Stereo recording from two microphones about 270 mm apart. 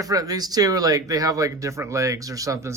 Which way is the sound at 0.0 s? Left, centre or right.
Centre.